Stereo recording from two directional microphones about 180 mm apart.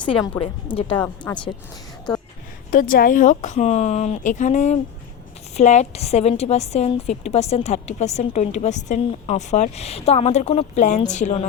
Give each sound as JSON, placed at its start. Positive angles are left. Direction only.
{"t": 0.0, "sound": "a woman's voice", "side_deg": 30}
{"t": 0.9, "sound": "speech", "side_deg": 10}
{"t": 2.6, "sound": "a woman's voice", "side_deg": 50}